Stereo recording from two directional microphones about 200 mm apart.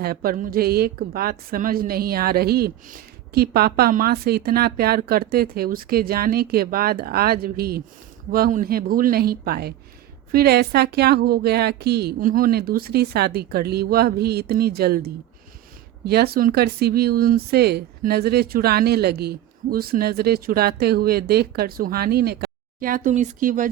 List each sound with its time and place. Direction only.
0.0 s a woman's voice: 50° right (ahead or behind)